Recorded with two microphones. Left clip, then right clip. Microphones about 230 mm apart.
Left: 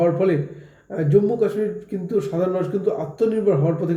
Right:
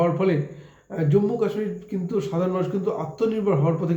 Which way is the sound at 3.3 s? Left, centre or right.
Centre.